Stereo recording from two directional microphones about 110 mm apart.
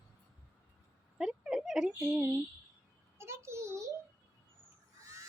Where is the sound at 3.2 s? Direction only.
25° right (ahead or behind).